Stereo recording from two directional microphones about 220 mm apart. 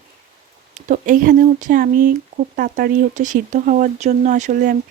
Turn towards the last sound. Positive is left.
turn(degrees=-35)  # may be behind; listen again after turning